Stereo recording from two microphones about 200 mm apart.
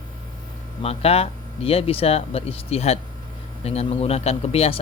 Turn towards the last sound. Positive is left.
turn(degrees=30)  # may be behind; listen again after turning